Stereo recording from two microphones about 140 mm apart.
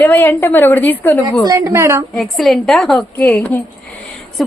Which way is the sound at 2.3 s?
Centre (ahead or behind).